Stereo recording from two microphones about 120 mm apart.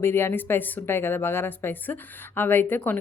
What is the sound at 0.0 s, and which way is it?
A woman's voice, 20° left (ahead or behind).